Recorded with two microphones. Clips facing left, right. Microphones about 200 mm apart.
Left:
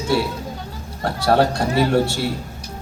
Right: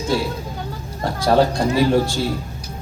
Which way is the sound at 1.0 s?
70° left (ahead or behind).